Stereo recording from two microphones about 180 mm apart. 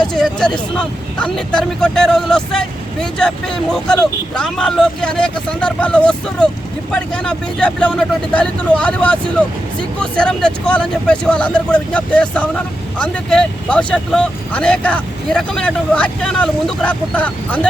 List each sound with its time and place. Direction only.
0.1 s speech: 5° left (ahead or behind)